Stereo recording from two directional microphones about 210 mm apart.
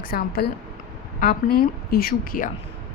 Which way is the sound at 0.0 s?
45° left (ahead or behind).